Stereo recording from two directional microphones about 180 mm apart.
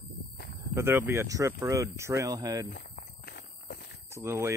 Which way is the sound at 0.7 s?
15° right (ahead or behind).